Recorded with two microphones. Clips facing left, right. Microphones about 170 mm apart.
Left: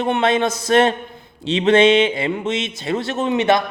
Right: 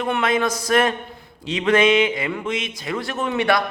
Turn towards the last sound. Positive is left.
turn(degrees=20)  # may be behind; listen again after turning